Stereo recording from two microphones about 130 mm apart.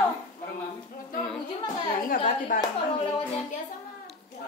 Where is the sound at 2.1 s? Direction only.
85° left.